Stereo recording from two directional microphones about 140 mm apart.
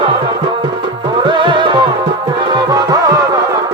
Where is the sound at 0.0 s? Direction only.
35° right (ahead or behind).